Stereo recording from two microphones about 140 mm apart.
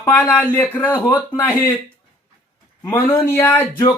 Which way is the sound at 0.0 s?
15° left (ahead or behind).